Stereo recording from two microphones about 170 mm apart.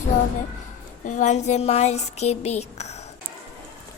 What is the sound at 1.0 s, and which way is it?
Speech, 45° left (ahead or behind).